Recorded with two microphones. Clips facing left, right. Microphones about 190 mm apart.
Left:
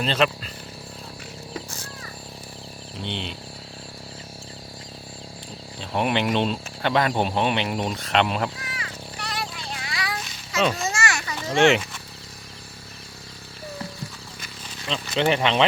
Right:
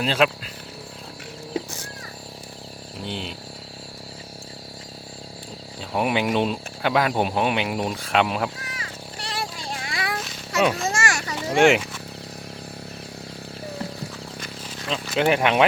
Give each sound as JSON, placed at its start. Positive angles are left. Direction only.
{"t": 0.0, "sound": "speech", "side_deg": -5}
{"t": 3.0, "sound": "speech", "side_deg": -5}
{"t": 5.9, "sound": "speech", "side_deg": -5}
{"t": 8.6, "sound": "children playing", "side_deg": -30}
{"t": 9.6, "sound": "a sound", "side_deg": -45}
{"t": 10.2, "sound": "a sound", "side_deg": -10}
{"t": 10.8, "sound": "children playing", "side_deg": -50}
{"t": 11.4, "sound": "speech", "side_deg": -15}
{"t": 14.8, "sound": "speech", "side_deg": -5}